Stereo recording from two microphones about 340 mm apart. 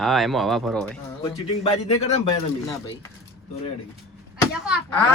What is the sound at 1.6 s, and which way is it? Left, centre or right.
Speech, centre.